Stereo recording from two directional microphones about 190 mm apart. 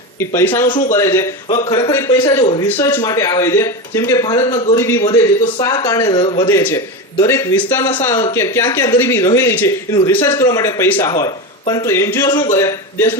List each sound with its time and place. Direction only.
0.2 s speech: 15° left (ahead or behind)
2.4 s speech: 30° left (ahead or behind)
2.6 s speech: 10° left (ahead or behind); by 6.5 s 25° left (ahead or behind)
6.5 s speech: 10° left (ahead or behind)